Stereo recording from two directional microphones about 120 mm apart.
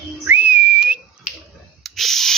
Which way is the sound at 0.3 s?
15° right (ahead or behind).